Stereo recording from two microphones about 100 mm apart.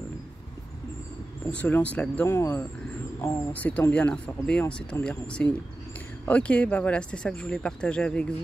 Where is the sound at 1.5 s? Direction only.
15° left (ahead or behind).